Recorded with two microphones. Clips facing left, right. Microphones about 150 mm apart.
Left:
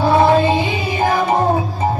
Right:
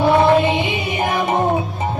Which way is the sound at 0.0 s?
20° right (ahead or behind).